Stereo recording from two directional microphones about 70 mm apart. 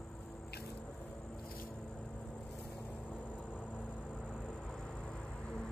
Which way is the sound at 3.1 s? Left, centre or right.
Left.